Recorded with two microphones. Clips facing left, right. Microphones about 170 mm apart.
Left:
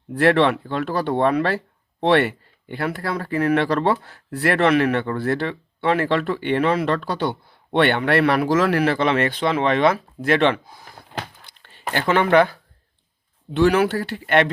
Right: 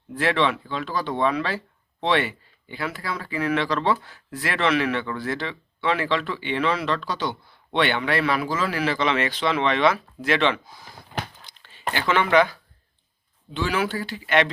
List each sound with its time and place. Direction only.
0.1 s speech: 65° left (ahead or behind)